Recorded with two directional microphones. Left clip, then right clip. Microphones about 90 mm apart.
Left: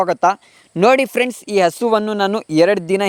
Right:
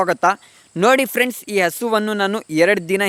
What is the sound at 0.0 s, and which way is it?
Speech, 45° left (ahead or behind).